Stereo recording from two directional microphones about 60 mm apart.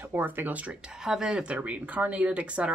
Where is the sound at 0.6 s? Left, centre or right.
Centre.